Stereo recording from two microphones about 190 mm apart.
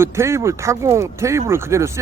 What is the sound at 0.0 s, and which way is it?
Speech, 15° right (ahead or behind).